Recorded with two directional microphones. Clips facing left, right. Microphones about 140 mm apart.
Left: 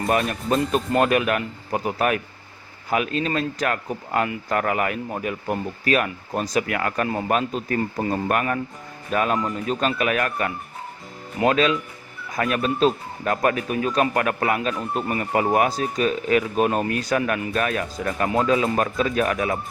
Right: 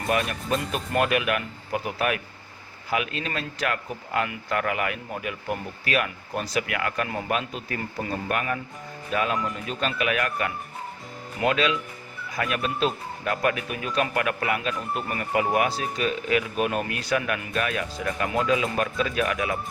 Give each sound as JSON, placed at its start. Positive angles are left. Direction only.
{"t": 0.1, "sound": "a man's voice", "side_deg": 40}